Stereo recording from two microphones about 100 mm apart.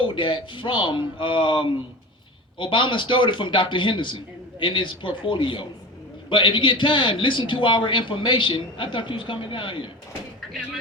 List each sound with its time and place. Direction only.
0.0 s a man's voice: 55° left (ahead or behind)